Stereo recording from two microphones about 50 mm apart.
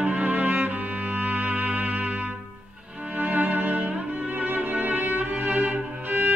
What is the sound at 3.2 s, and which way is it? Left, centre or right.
Music, right.